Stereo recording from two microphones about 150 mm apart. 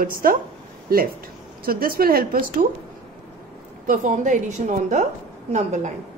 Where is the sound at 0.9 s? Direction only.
85° right.